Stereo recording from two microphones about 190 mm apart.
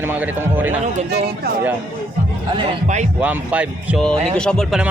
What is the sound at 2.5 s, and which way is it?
Speech, 40° right (ahead or behind).